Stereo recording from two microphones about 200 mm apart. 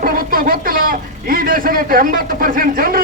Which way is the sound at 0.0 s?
45° right (ahead or behind).